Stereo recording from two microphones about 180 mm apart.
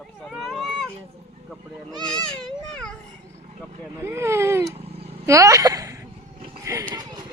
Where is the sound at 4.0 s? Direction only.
15° right (ahead or behind).